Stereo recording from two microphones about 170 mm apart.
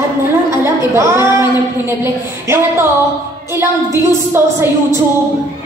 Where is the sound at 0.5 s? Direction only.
15° right (ahead or behind).